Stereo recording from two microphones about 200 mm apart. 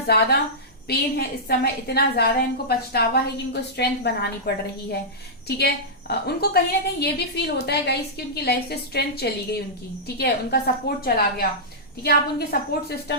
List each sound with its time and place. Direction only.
0.9 s a woman's voice: 55° left (ahead or behind)